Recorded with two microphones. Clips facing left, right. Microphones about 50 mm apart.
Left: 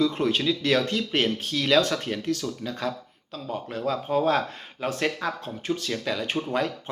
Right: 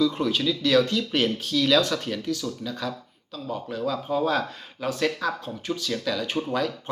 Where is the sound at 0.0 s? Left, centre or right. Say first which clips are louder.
Even; left.